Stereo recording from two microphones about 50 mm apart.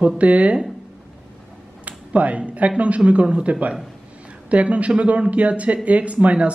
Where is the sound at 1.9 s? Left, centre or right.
Right.